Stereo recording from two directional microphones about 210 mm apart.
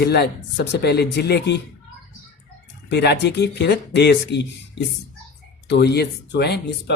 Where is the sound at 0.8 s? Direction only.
50° left (ahead or behind).